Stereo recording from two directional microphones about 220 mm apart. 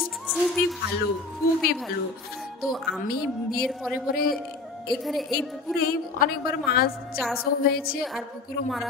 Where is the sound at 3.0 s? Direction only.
45° left (ahead or behind).